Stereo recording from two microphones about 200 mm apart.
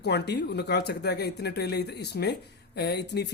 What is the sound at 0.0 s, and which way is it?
Speech, 55° left (ahead or behind).